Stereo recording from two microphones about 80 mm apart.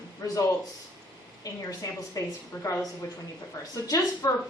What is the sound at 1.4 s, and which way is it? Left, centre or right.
A woman's voice, left.